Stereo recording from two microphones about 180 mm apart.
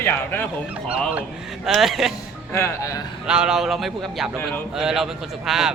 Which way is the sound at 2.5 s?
15° left (ahead or behind).